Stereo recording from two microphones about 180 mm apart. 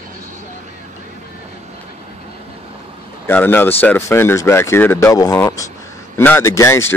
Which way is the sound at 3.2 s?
10° left (ahead or behind).